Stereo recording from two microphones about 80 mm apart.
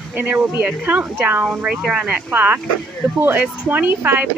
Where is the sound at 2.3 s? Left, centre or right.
Right.